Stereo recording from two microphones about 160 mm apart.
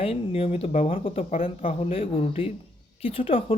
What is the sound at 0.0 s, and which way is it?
Speech, 35° left (ahead or behind).